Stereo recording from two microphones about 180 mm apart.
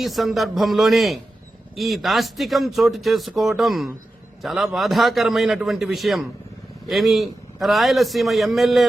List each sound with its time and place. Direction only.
0.0 s a man's voice: centre (ahead or behind)